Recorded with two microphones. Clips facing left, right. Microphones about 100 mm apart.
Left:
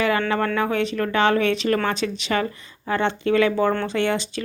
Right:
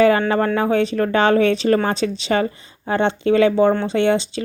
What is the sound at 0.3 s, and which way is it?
Speech, 30° right (ahead or behind).